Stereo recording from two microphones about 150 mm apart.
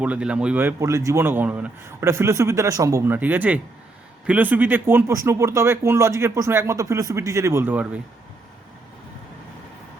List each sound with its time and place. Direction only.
0.0 s speech: 10° right (ahead or behind)